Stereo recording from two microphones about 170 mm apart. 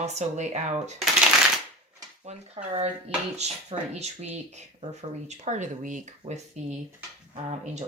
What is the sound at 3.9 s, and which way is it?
Speech, 40° right (ahead or behind).